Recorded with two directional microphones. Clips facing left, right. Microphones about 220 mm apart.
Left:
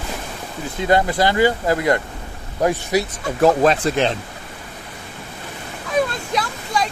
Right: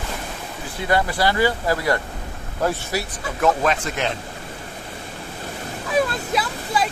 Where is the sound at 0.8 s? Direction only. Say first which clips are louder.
Left 3 dB; 20° left (ahead or behind).